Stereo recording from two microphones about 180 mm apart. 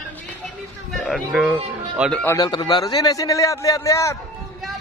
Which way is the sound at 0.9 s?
Centre (ahead or behind).